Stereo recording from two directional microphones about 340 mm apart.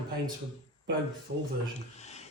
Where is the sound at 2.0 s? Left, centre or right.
Centre.